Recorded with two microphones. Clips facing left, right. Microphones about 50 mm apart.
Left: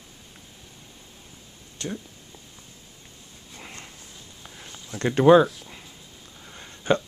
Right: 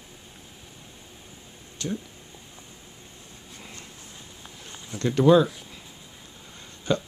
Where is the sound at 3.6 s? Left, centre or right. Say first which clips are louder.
Left 3 dB; left.